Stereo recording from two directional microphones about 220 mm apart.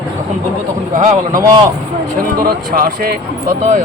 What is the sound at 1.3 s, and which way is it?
Speech, 15° right (ahead or behind).